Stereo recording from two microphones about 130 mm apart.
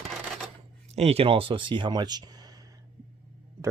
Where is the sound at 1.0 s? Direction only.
50° right (ahead or behind); by 2.5 s 30° right (ahead or behind).